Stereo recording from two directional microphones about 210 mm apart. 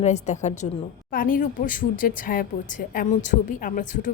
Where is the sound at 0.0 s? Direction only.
30° left (ahead or behind).